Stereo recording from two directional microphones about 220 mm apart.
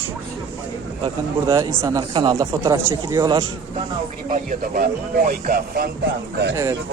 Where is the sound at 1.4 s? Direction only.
15° right (ahead or behind).